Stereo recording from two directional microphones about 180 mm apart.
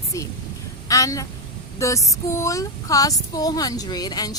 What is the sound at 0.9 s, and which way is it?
A woman's voice, 20° left (ahead or behind).